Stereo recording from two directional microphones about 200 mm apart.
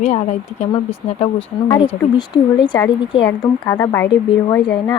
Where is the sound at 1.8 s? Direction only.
20° left (ahead or behind).